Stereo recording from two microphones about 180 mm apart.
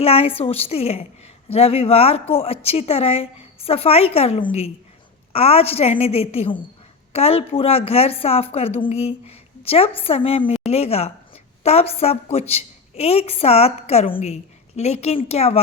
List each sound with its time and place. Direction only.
0.0 s a woman's voice: 30° left (ahead or behind)
14.1 s a woman's voice: 45° left (ahead or behind)
14.8 s a woman's voice: 35° left (ahead or behind)